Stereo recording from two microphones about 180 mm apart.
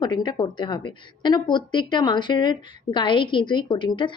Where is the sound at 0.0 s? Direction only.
25° left (ahead or behind).